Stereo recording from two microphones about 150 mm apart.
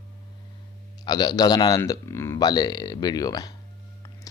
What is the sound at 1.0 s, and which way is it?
Speech, 25° left (ahead or behind).